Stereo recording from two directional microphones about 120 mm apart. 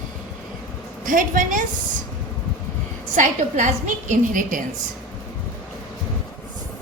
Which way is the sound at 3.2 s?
90° right.